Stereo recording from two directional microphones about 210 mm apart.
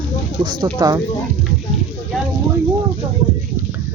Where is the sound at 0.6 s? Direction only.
20° right (ahead or behind).